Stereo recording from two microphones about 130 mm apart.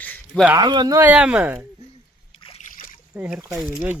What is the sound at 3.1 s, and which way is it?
Speech, 10° right (ahead or behind).